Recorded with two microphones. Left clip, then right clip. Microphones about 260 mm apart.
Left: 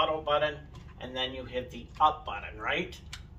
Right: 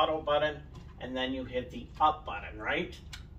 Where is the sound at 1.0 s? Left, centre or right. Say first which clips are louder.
Even; centre.